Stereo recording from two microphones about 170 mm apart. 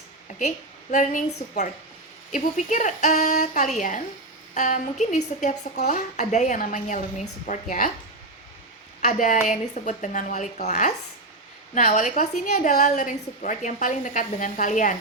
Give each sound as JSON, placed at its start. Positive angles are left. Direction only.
{"t": 0.3, "sound": "speech", "side_deg": 50}
{"t": 9.0, "sound": "speech", "side_deg": 45}